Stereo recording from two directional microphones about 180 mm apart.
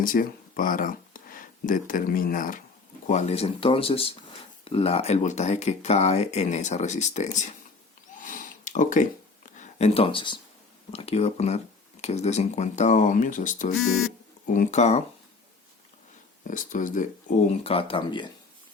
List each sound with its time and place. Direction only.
0.0 s speech: 50° left (ahead or behind)
3.1 s speech: 40° left (ahead or behind)
8.2 s a sound: 45° left (ahead or behind)
9.6 s speech: 35° left (ahead or behind)
13.7 s speech: centre (ahead or behind)
14.4 s speech: 45° left (ahead or behind)
16.5 s speech: 45° left (ahead or behind); by 18.3 s 30° left (ahead or behind)